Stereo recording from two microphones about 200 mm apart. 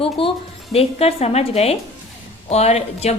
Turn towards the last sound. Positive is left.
turn(degrees=30)  # may be behind; listen again after turning